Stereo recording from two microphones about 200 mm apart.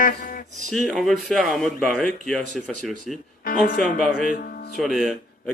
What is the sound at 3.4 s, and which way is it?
Speech, 45° left (ahead or behind).